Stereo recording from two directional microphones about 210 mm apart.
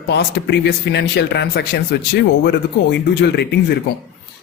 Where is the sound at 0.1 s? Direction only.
50° left (ahead or behind).